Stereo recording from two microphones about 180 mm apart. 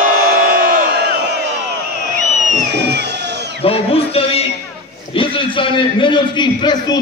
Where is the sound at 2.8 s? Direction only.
70° right (ahead or behind).